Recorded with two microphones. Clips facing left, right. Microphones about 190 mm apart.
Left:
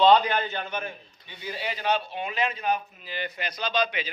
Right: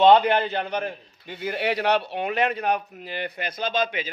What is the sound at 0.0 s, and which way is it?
A man's voice, 25° right (ahead or behind).